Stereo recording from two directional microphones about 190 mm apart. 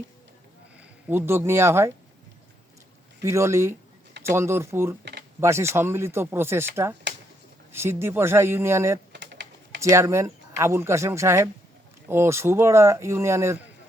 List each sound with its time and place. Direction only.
0.8 s speech: 10° right (ahead or behind)
3.2 s speech: 15° right (ahead or behind)
9.1 s typing: 65° right (ahead or behind)
9.8 s speech: 15° right (ahead or behind)